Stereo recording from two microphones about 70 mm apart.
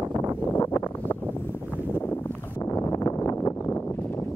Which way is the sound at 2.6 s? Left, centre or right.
Left.